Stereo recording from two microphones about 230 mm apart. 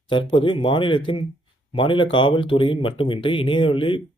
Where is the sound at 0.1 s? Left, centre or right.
Left.